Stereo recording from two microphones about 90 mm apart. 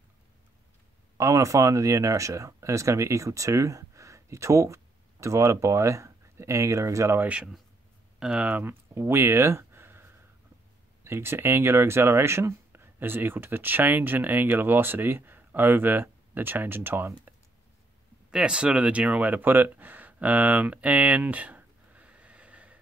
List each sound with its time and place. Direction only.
1.1 s speech: 35° right (ahead or behind)
7.2 s speech: 15° right (ahead or behind)
18.3 s speech: 10° right (ahead or behind)